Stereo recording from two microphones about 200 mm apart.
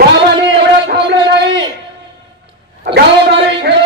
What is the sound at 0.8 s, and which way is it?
Speech, 60° right (ahead or behind).